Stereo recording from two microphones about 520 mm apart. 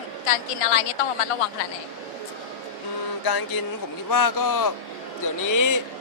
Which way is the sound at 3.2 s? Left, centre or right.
Left.